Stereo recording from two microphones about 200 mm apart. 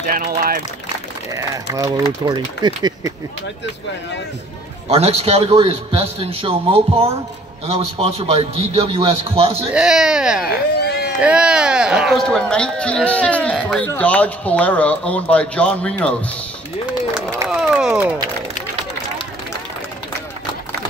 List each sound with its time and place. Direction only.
0.0 s speech: 45° right (ahead or behind)
1.3 s a man's voice: 15° right (ahead or behind)
4.8 s a man's voice: 30° right (ahead or behind)
9.8 s speech: 5° right (ahead or behind)
10.8 s a sound: 55° left (ahead or behind)
11.1 s speech: 5° right (ahead or behind)
17.1 s a sound: centre (ahead or behind)